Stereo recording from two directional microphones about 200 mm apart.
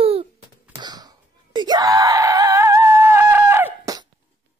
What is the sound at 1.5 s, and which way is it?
Screaming, 20° right (ahead or behind).